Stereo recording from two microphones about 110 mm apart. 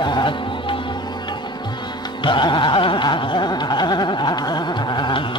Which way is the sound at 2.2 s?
45° left (ahead or behind).